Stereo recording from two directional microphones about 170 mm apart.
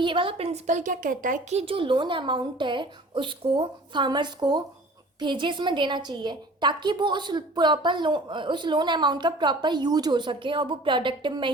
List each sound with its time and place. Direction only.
0.0 s a woman's voice: 30° right (ahead or behind)